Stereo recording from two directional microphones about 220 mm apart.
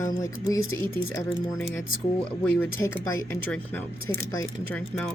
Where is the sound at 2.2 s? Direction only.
10° left (ahead or behind).